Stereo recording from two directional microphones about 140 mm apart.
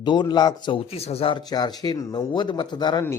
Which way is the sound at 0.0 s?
30° left (ahead or behind).